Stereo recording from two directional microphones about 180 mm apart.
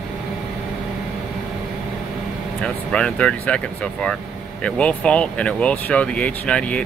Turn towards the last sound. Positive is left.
turn(degrees=5)  # may be behind; listen again after turning